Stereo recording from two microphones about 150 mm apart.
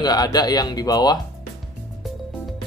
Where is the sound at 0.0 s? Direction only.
25° left (ahead or behind).